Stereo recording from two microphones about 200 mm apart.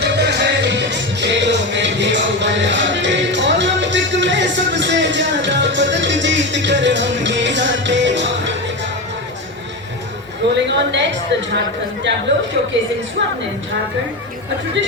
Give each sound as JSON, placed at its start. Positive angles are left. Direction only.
{"t": 0.0, "sound": "music", "side_deg": -55}
{"t": 10.5, "sound": "speech", "side_deg": -60}
{"t": 14.8, "sound": "speech", "side_deg": -65}